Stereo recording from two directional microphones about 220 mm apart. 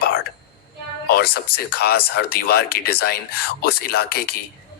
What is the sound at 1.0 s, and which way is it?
Speech, 45° left (ahead or behind).